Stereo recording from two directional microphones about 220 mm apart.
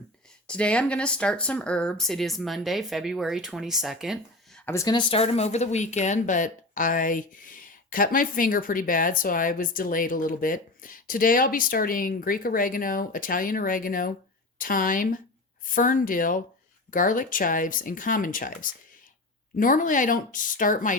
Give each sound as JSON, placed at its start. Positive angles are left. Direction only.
{"t": 0.4, "sound": "speech", "side_deg": 5}
{"t": 4.6, "sound": "speech", "side_deg": 15}